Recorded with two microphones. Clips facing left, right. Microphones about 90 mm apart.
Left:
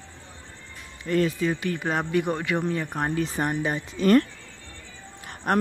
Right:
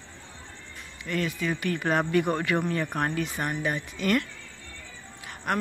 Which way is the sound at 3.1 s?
30° left (ahead or behind).